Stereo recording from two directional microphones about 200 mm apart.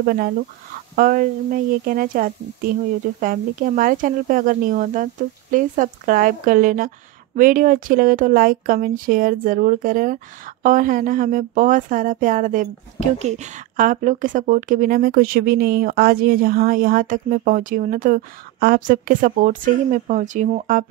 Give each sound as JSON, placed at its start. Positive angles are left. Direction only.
{"t": 0.0, "sound": "speech", "side_deg": -50}